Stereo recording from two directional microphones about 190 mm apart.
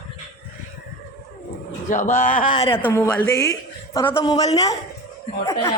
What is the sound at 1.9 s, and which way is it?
Speech, 45° left (ahead or behind).